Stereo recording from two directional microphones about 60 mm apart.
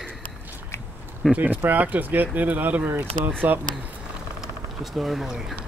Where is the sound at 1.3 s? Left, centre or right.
Right.